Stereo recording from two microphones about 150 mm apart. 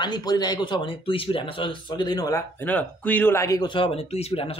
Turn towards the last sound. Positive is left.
turn(degrees=40)  # may be behind; listen again after turning